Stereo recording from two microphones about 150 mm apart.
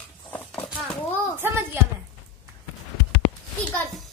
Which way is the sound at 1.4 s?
15° right (ahead or behind).